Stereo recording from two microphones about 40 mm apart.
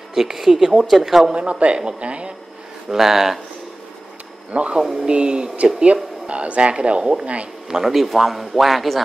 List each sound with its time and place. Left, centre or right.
0.1 s speech: centre
1.3 s speech: right
2.9 s speech: centre
4.5 s speech: right
4.7 s speech: centre
5.1 s speech: right
7.7 s a man's voice: centre